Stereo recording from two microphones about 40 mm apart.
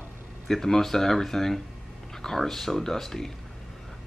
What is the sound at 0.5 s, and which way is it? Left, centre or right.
Speech, centre.